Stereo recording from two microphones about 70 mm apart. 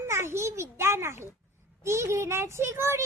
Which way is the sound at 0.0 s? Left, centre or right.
Right.